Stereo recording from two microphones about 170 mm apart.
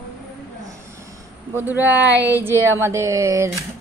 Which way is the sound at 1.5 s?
10° right (ahead or behind).